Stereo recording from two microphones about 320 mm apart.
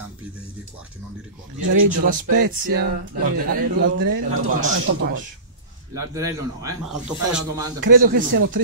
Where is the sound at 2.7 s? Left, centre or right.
Right.